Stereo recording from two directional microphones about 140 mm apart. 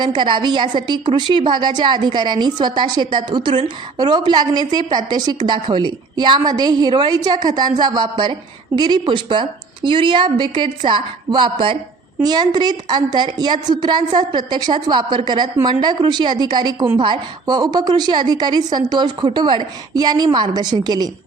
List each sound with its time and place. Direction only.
0.0 s a woman's voice: 35° right (ahead or behind)